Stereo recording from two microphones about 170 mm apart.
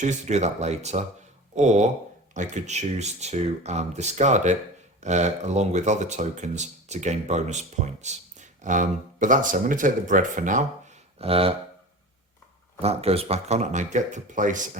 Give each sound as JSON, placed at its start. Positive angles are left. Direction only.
{"t": 0.0, "sound": "speech", "side_deg": -40}
{"t": 11.2, "sound": "speech", "side_deg": -35}
{"t": 12.8, "sound": "speech", "side_deg": -35}